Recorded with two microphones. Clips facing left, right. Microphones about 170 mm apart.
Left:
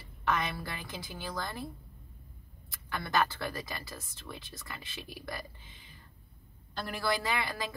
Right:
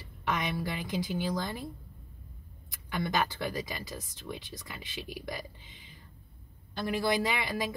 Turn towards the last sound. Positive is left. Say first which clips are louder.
# right 2 dB
turn(degrees=-20)  # may be behind; listen again after turning